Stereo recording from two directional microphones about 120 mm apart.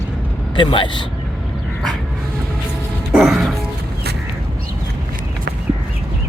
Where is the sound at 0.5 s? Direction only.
40° left (ahead or behind).